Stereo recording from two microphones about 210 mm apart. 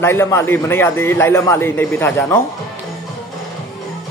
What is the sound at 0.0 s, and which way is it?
A man's voice, 10° left (ahead or behind).